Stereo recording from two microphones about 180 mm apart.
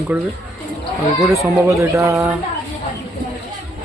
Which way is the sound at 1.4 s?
15° right (ahead or behind).